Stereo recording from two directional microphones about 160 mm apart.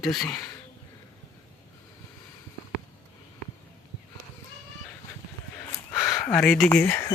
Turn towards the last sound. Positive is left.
turn(degrees=10)  # may be behind; listen again after turning